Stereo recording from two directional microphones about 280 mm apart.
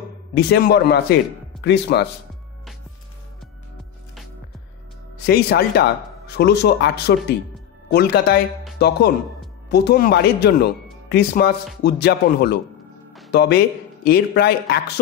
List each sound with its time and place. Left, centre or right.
0.3 s speech: left
5.2 s speech: left